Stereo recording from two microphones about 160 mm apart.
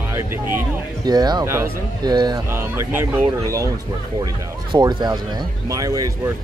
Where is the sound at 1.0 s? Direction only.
25° right (ahead or behind).